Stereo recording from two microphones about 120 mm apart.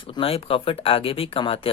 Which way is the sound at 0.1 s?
50° left (ahead or behind).